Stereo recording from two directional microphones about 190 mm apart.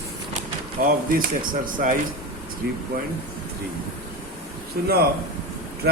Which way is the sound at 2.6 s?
60° right (ahead or behind).